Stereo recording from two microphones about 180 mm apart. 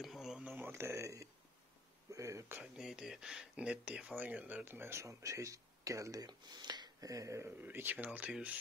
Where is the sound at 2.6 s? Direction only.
5° right (ahead or behind).